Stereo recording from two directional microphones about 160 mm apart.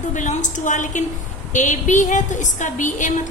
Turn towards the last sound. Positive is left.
turn(degrees=50)  # may be behind; listen again after turning